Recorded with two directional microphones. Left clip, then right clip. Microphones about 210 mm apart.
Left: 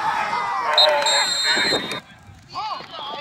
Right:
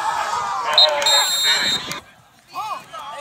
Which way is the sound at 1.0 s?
30° left (ahead or behind).